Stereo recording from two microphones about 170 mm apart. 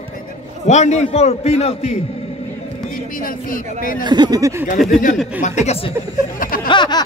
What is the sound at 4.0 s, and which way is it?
Speech, 25° right (ahead or behind).